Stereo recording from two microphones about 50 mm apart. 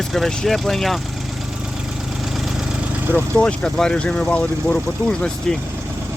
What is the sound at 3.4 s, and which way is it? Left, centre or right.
Speech, centre.